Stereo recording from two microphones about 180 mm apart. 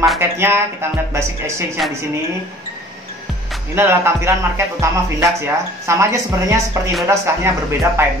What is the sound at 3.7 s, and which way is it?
Speech, 15° right (ahead or behind).